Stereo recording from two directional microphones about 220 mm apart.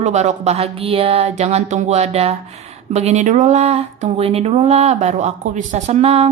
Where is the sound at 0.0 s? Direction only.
30° right (ahead or behind).